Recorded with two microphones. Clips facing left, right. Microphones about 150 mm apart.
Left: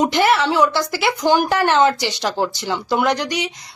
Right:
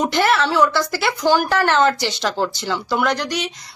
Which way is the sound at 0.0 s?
15° left (ahead or behind).